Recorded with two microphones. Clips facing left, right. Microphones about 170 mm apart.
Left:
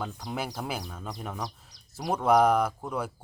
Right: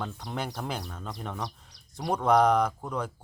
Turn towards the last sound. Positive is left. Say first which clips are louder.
# even
turn(degrees=10)  # may be behind; listen again after turning